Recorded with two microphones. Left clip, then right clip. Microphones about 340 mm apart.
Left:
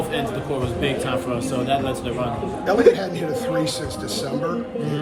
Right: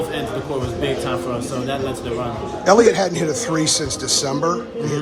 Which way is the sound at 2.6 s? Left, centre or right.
Centre.